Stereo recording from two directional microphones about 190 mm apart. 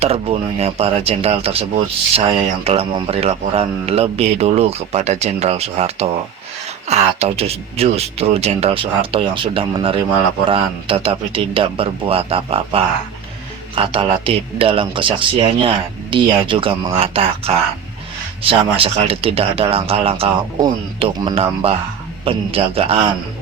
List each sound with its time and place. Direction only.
0.0 s speech: 30° right (ahead or behind)